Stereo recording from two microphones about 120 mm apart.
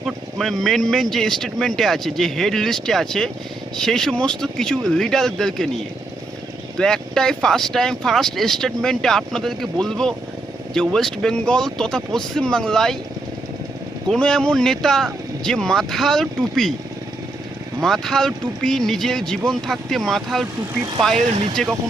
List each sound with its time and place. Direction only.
0.0 s speech: centre (ahead or behind)
6.7 s speech: 5° left (ahead or behind)
14.1 s speech: 5° left (ahead or behind)
17.8 s speech: 5° left (ahead or behind)
21.5 s speech: 5° left (ahead or behind)